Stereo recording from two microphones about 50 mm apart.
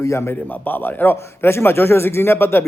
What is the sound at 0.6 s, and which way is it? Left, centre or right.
Speech, left.